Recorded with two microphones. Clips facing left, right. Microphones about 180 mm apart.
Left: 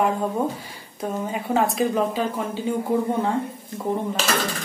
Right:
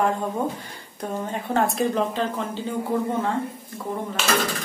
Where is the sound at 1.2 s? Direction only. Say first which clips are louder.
Left 1 dB; 5° left (ahead or behind).